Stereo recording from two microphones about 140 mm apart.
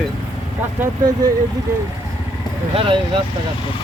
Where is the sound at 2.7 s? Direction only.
40° right (ahead or behind).